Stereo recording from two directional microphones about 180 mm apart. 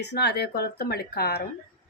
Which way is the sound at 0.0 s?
65° left (ahead or behind).